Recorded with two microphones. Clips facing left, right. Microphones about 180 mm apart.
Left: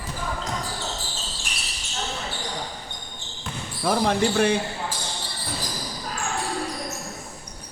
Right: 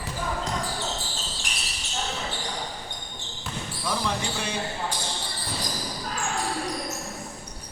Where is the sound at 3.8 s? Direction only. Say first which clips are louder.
Left 8 dB; 60° left (ahead or behind).